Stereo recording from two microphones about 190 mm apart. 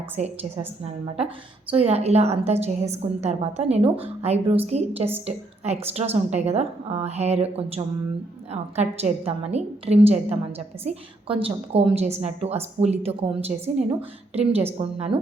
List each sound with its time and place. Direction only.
0.2 s a woman's voice: 35° right (ahead or behind)